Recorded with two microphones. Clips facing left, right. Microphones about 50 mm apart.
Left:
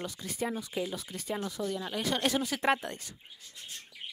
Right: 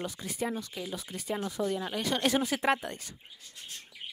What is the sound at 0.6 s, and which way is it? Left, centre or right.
Speech, centre.